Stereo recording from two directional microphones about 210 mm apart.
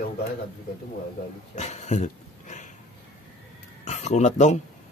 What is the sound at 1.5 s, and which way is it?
Speech, 30° left (ahead or behind).